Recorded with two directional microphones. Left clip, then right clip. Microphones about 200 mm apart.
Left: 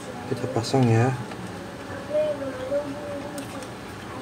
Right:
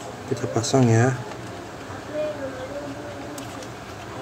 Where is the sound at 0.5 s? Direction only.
15° right (ahead or behind).